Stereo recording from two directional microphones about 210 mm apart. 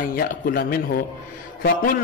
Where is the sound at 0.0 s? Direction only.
45° left (ahead or behind).